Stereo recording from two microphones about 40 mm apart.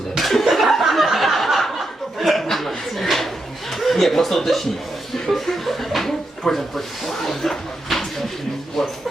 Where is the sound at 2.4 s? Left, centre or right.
Centre.